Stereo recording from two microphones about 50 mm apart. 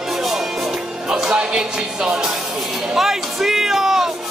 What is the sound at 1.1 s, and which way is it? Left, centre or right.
Music, centre.